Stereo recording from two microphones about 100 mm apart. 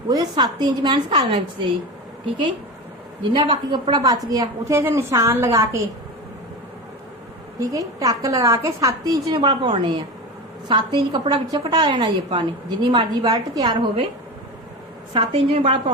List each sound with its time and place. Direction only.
0.1 s a woman's voice: 40° right (ahead or behind)
3.3 s a woman's voice: 55° right (ahead or behind)
4.3 s a woman's voice: 35° right (ahead or behind)
7.6 s a woman's voice: 35° right (ahead or behind)
15.1 s a woman's voice: 70° right (ahead or behind)